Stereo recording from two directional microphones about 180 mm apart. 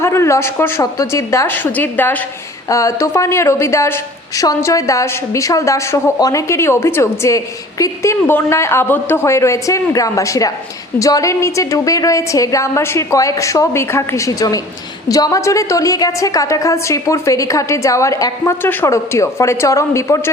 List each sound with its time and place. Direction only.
0.0 s a woman's voice: 15° left (ahead or behind)